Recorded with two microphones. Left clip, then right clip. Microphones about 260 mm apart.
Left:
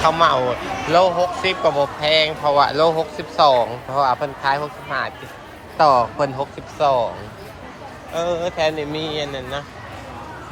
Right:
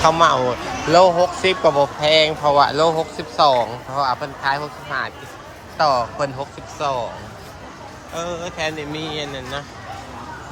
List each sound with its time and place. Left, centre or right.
0.0 s speech: centre
8.1 s speech: centre